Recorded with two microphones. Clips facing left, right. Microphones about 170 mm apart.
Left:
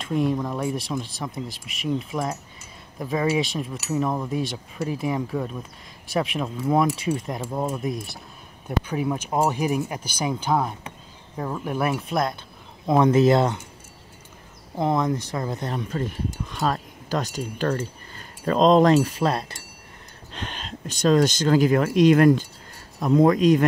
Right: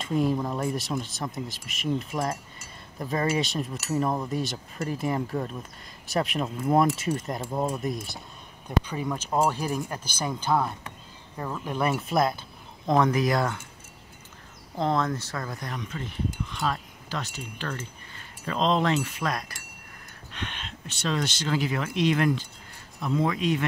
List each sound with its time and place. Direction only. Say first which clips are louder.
0.0 s speech: left 2 dB; centre (ahead or behind)
12.8 s speech: left 4 dB; 10° left (ahead or behind)
13.1 s speech: left 7 dB; 25° left (ahead or behind)
14.8 s speech: left 3 dB; 15° left (ahead or behind); by 23.6 s 45° left (ahead or behind)